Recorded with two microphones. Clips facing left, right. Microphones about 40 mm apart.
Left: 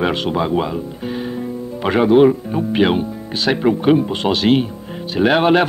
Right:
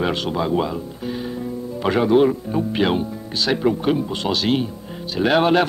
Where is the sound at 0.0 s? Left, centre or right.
Left.